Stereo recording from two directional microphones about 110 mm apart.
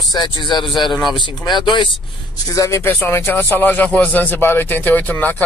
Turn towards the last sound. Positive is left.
turn(degrees=15)  # may be behind; listen again after turning